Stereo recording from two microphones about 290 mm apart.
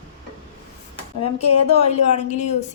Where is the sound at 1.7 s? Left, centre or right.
Left.